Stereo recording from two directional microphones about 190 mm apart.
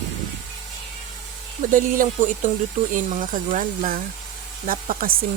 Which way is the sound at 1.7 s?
45° right (ahead or behind).